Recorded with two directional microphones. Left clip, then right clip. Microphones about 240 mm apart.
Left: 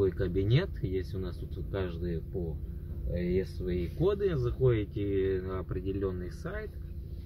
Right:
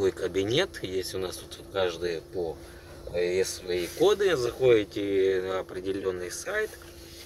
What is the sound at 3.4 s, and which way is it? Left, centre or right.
Speech, centre.